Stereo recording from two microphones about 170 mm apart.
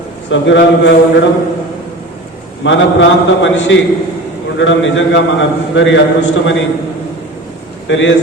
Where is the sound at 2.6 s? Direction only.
90° left.